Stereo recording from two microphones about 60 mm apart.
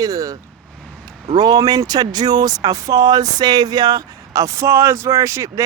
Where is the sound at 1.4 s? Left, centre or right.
Right.